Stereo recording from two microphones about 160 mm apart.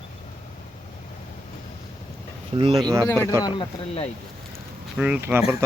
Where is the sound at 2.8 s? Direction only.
20° right (ahead or behind).